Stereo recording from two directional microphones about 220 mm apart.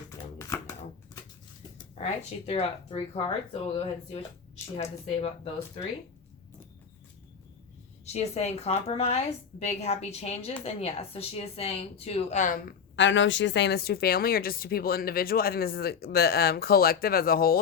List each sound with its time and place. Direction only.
0.3 s shuffling cards: 15° left (ahead or behind)
2.0 s speech: 30° left (ahead or behind)
8.0 s speech: 30° left (ahead or behind)
13.0 s a woman's voice: 55° left (ahead or behind)